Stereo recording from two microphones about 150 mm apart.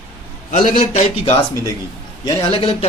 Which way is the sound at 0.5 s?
45° left (ahead or behind).